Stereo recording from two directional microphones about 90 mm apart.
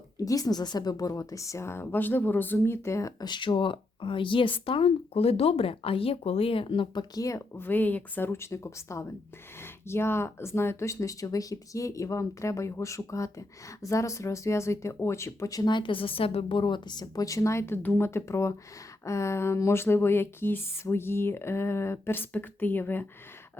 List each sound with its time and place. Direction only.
0.3 s speech: 45° left (ahead or behind)
3.2 s speech: 55° left (ahead or behind); by 7.0 s 75° left (ahead or behind)
7.2 s speech: 40° left (ahead or behind)
7.5 s speech: 20° left (ahead or behind); by 15.7 s 40° left (ahead or behind)
15.7 s a woman's voice: 70° left (ahead or behind); by 23.0 s 20° left (ahead or behind)